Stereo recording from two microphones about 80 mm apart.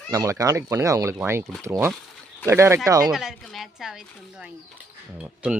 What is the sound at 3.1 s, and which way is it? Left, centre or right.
Speech, centre.